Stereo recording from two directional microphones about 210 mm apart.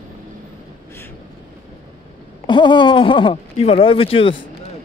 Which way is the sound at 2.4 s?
20° left (ahead or behind).